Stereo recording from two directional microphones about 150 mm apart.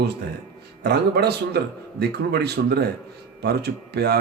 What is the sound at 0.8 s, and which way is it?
A man's voice, 90° right.